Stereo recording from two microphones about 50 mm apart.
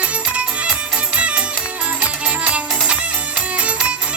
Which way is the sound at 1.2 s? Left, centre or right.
Right.